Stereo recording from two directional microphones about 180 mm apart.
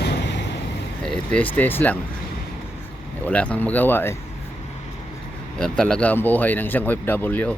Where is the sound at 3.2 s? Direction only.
10° left (ahead or behind).